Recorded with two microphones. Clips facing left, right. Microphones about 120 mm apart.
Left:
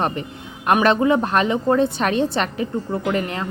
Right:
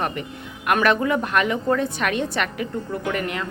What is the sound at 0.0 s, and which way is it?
Speech, 30° left (ahead or behind).